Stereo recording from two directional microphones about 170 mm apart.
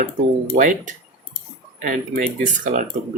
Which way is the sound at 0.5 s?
50° right (ahead or behind).